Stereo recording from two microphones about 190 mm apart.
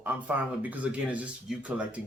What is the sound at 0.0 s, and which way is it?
Speech, 10° right (ahead or behind).